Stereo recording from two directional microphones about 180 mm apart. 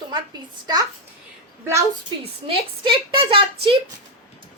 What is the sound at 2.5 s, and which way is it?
A woman's voice, 30° right (ahead or behind).